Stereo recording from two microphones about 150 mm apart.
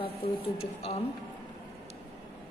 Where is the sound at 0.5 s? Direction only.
45° left (ahead or behind).